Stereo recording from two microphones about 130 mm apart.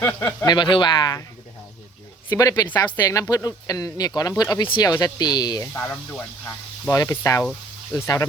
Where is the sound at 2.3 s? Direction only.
25° left (ahead or behind).